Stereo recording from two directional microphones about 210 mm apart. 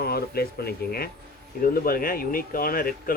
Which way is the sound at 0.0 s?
45° left (ahead or behind).